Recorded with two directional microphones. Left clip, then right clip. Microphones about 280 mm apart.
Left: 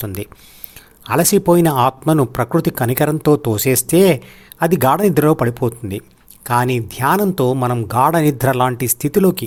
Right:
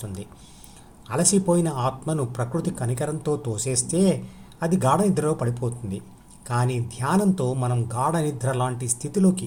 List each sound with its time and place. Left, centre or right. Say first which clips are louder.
0.0 s speech: left 11 dB; left